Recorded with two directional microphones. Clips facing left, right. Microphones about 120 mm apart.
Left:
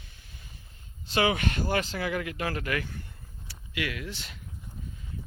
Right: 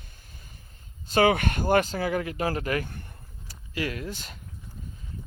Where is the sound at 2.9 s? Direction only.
50° right (ahead or behind).